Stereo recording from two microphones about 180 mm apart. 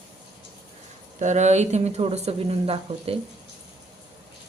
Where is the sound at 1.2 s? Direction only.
40° right (ahead or behind).